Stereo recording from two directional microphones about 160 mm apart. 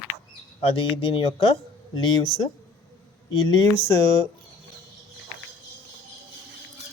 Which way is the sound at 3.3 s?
25° left (ahead or behind).